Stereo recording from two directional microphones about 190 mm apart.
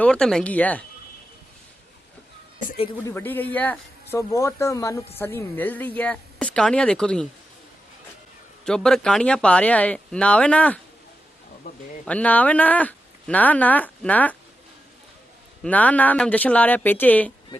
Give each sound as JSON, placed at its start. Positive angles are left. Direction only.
{"t": 0.0, "sound": "speech", "side_deg": 5}
{"t": 3.1, "sound": "speech", "side_deg": 10}
{"t": 8.6, "sound": "speech", "side_deg": 5}
{"t": 12.0, "sound": "speech", "side_deg": 5}
{"t": 15.6, "sound": "speech", "side_deg": 10}